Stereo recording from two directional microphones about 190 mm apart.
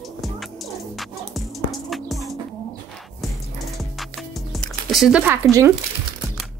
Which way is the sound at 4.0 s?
Centre (ahead or behind).